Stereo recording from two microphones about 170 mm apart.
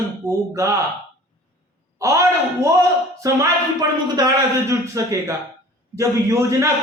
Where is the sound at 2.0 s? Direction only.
20° right (ahead or behind).